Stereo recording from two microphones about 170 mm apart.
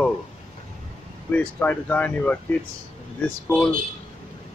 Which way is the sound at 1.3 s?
10° left (ahead or behind).